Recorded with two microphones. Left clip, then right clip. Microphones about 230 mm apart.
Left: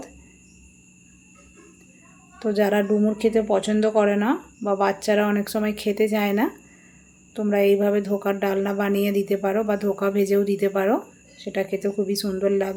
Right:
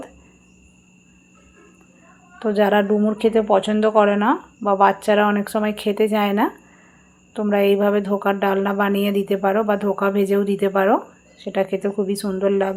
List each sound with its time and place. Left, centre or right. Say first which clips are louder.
2.4 s a woman's voice: right 4 dB; centre